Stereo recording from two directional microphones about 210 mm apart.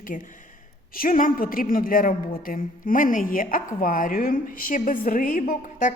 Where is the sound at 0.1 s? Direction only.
40° left (ahead or behind).